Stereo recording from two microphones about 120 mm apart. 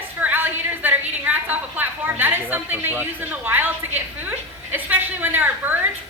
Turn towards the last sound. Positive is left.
turn(degrees=-15)  # may be behind; listen again after turning